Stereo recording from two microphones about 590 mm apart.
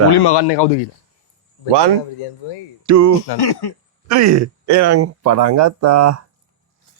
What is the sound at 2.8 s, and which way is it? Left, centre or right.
Music, right.